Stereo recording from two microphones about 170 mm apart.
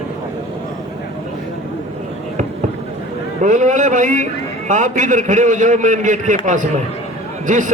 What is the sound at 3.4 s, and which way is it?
A man's voice, 45° right (ahead or behind).